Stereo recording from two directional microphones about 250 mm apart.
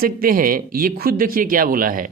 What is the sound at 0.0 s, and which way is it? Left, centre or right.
Speech, right.